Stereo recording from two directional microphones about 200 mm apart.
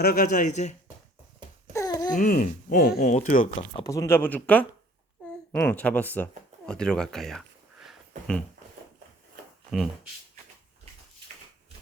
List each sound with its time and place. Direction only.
0.0 s a man's voice: 45° left (ahead or behind)
1.7 s babbling: 15° left (ahead or behind)
2.1 s speech: 40° left (ahead or behind)
3.7 s speech: 20° left (ahead or behind); by 8.4 s centre (ahead or behind)
9.7 s speech: centre (ahead or behind)